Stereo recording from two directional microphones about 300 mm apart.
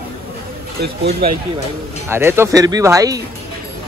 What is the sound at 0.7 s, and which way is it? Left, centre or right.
Speech, right.